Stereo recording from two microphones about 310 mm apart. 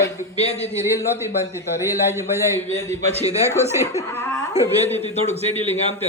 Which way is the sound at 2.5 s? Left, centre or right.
Centre.